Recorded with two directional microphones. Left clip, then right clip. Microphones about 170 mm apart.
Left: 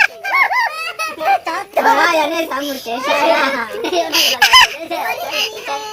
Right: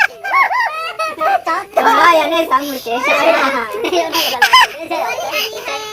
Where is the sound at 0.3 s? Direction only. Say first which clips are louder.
Right 1 dB; 40° left (ahead or behind).